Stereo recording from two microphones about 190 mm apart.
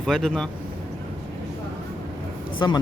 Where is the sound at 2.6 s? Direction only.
20° left (ahead or behind).